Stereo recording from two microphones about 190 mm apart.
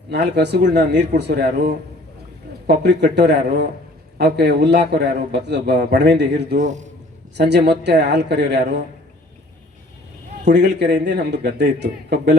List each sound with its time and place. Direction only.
0.1 s a man's voice: 60° right (ahead or behind)
2.6 s a man's voice: 65° right (ahead or behind)
6.6 s a man's voice: 40° right (ahead or behind)
7.3 s a man's voice: 60° right (ahead or behind)
10.4 s a man's voice: 65° right (ahead or behind)